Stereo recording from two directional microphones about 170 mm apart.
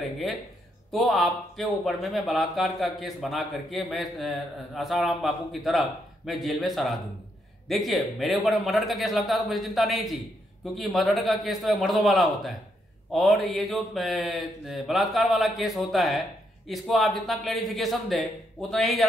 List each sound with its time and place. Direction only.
0.9 s speech: centre (ahead or behind)